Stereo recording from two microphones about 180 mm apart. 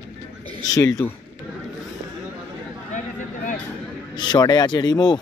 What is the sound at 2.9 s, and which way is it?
Vehicle, 45° left (ahead or behind).